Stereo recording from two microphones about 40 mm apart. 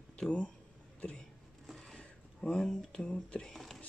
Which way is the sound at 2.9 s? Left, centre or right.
Left.